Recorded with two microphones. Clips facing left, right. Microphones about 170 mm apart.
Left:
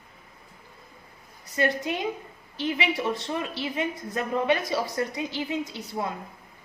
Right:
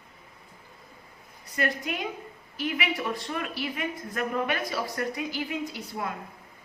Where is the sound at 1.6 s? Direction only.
25° left (ahead or behind).